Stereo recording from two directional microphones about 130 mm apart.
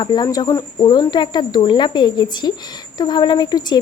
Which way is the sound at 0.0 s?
35° left (ahead or behind).